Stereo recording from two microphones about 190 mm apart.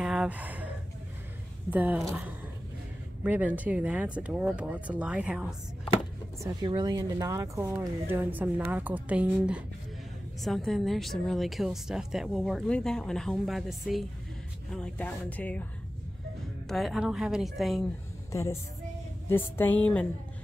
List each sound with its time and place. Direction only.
0.0 s gasp: 5° right (ahead or behind)
1.7 s speech: 10° right (ahead or behind)
6.4 s a woman's voice: 20° right (ahead or behind); by 15.6 s 10° left (ahead or behind)
16.6 s a woman's voice: centre (ahead or behind)
18.3 s music: 15° left (ahead or behind)
19.2 s speech: 10° left (ahead or behind)